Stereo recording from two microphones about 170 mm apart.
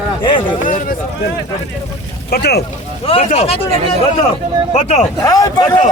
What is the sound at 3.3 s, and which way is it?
Speech, 35° left (ahead or behind).